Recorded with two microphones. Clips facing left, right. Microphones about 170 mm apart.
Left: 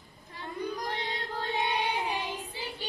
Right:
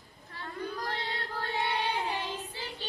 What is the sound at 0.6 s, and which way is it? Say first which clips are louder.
Child singing: left 2 dB; 15° left (ahead or behind).